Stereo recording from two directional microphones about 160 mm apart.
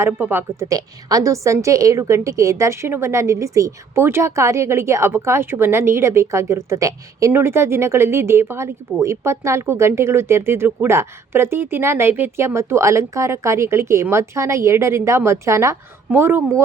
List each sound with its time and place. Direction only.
0.0 s a woman's voice: 15° right (ahead or behind)